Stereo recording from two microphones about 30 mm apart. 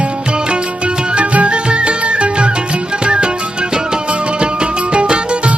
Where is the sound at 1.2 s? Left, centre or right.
Right.